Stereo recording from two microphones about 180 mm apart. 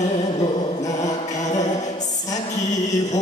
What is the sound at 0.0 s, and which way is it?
Music, 40° left (ahead or behind).